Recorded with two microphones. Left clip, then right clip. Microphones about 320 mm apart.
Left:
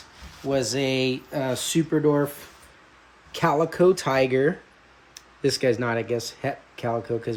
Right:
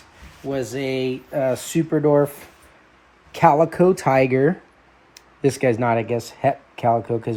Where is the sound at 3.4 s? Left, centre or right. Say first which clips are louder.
Right 5 dB; centre.